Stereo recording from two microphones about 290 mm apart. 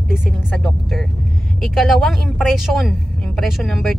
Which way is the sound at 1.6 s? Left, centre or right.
Centre.